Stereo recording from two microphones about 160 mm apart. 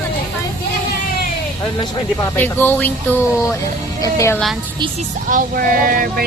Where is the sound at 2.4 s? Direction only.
10° left (ahead or behind).